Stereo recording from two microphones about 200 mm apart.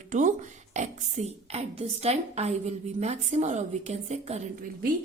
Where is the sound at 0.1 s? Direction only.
40° right (ahead or behind).